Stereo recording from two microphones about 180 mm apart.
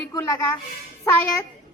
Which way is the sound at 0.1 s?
20° left (ahead or behind).